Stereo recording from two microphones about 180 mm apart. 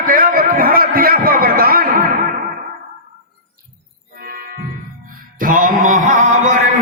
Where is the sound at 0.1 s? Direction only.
55° right (ahead or behind).